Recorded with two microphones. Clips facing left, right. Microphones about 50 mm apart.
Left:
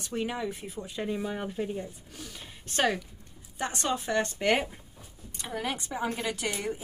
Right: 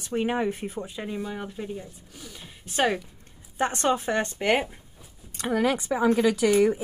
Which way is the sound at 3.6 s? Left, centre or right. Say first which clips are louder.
Right 7 dB; right.